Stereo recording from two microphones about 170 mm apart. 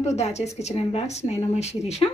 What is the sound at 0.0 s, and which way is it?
A woman's voice, 40° left (ahead or behind).